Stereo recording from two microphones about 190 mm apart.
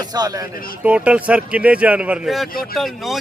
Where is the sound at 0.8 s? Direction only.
5° right (ahead or behind).